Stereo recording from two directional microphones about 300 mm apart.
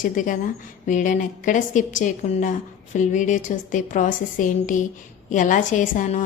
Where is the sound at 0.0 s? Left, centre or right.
Left.